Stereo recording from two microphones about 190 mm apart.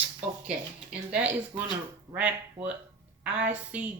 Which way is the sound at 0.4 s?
5° right (ahead or behind).